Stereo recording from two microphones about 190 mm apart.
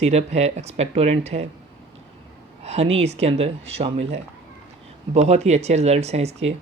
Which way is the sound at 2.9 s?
35° right (ahead or behind).